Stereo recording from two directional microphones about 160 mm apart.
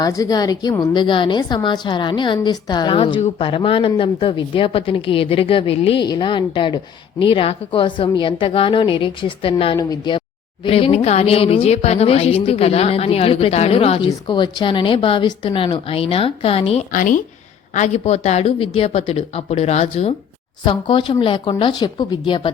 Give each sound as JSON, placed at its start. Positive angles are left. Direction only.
{"t": 0.0, "sound": "speech", "side_deg": 20}
{"t": 16.9, "sound": "speech", "side_deg": 55}
{"t": 17.7, "sound": "speech", "side_deg": 45}
{"t": 20.7, "sound": "a woman's voice", "side_deg": 30}